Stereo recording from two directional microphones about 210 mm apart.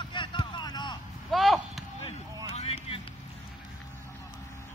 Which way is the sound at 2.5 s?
30° left (ahead or behind).